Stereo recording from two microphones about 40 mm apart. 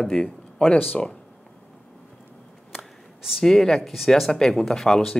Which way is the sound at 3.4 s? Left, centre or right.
Centre.